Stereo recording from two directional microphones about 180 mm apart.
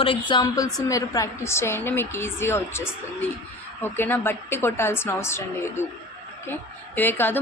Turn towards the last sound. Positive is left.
turn(degrees=10)  # may be behind; listen again after turning